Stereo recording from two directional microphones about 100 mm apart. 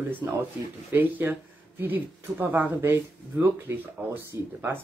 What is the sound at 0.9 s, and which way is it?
Speech, 20° right (ahead or behind).